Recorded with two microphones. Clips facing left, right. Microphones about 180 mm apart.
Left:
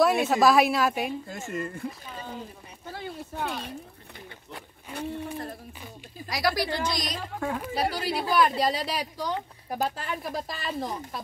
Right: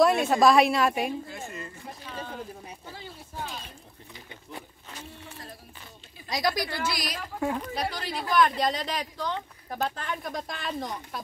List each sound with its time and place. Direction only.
0.0 s a woman's voice: centre (ahead or behind)
1.3 s speech: 45° left (ahead or behind)
3.0 s speech: 65° left (ahead or behind)
4.9 s speech: 55° left (ahead or behind)
6.2 s speech: 20° right (ahead or behind)
6.8 s a woman's voice: 5° right (ahead or behind)
7.6 s speech: 5° left (ahead or behind)